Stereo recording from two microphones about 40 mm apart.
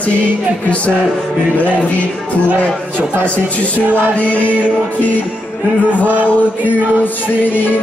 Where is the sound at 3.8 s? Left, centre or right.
Right.